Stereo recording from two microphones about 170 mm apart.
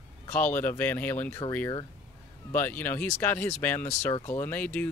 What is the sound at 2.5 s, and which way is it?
Speech, 10° left (ahead or behind).